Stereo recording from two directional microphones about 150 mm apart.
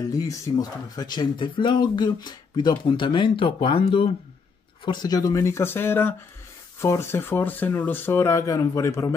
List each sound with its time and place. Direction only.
0.1 s speech: 25° left (ahead or behind)